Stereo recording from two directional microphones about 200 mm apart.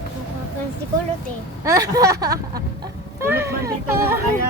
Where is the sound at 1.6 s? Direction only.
15° right (ahead or behind).